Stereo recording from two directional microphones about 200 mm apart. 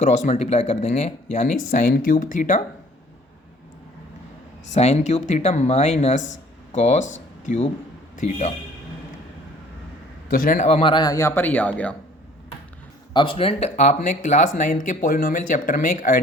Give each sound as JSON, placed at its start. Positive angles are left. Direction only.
{"t": 0.0, "sound": "speech", "side_deg": 35}
{"t": 4.7, "sound": "speech", "side_deg": 35}
{"t": 10.2, "sound": "a man's voice", "side_deg": 45}
{"t": 10.7, "sound": "speech", "side_deg": 30}
{"t": 13.1, "sound": "speech", "side_deg": 25}